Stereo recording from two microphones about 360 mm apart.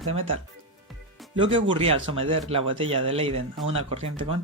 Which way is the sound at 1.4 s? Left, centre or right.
Centre.